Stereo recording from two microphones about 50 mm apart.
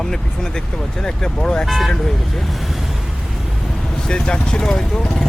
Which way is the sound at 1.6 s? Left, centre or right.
Centre.